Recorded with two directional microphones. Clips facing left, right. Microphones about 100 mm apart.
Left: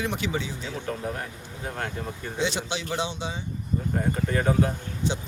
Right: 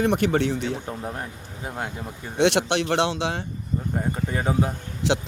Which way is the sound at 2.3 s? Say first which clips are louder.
Right 9 dB; 75° right (ahead or behind).